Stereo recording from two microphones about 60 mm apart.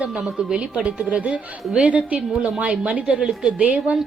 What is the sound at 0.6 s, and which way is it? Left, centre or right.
Speech, centre.